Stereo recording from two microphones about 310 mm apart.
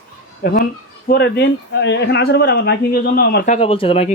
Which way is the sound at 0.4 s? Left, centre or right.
Left.